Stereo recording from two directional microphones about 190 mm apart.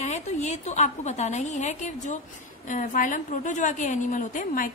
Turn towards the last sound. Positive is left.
turn(degrees=45)  # may be behind; listen again after turning